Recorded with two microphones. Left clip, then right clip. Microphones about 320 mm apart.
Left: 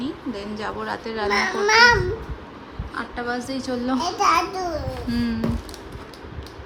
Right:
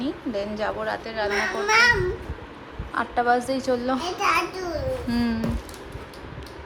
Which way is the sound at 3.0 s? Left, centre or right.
Centre.